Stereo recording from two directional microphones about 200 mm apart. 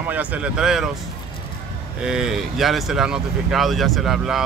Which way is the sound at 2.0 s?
Centre (ahead or behind).